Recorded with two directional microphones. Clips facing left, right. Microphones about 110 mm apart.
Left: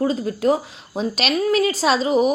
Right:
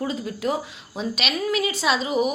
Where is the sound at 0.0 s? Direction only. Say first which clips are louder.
Left 7 dB; 40° left (ahead or behind).